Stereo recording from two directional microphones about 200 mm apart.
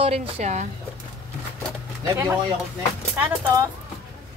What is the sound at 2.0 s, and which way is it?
Speech, 15° right (ahead or behind).